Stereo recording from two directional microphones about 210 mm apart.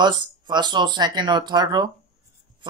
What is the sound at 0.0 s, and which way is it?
Speech, 20° right (ahead or behind).